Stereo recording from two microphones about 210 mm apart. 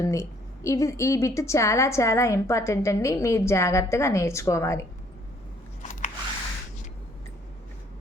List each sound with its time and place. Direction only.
0.0 s a woman's voice: 15° left (ahead or behind)
5.8 s biting: 35° left (ahead or behind)